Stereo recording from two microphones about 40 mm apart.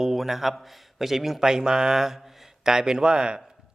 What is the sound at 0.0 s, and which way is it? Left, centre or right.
A man's voice, centre.